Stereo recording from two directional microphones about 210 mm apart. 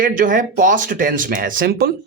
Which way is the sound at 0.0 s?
40° right (ahead or behind).